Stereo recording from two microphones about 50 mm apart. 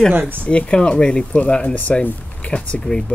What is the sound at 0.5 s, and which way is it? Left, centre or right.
Speech, left.